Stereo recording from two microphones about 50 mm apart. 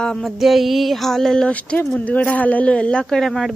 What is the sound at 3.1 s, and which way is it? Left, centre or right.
Speech, centre.